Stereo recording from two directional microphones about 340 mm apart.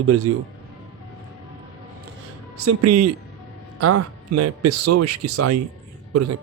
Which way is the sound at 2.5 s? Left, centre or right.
Right.